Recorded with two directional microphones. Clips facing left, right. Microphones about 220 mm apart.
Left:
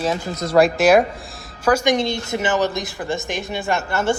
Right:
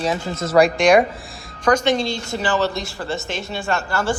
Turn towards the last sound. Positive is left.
turn(degrees=20)  # may be behind; listen again after turning